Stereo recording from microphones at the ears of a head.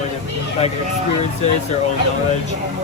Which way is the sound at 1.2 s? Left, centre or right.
Left.